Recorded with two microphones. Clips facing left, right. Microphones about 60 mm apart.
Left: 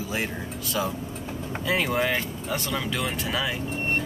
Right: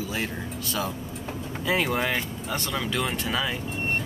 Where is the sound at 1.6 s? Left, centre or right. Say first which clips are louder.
Even; centre.